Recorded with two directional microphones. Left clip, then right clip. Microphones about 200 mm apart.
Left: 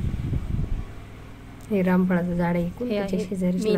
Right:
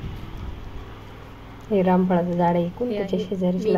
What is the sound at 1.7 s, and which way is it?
A woman's voice, 20° left (ahead or behind).